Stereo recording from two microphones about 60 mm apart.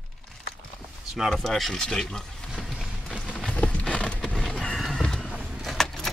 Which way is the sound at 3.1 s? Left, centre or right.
Centre.